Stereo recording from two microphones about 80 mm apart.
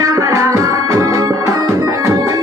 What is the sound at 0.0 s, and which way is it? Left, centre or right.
Music, right.